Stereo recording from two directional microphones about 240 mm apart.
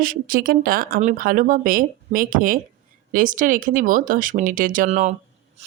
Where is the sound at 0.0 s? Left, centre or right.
Right.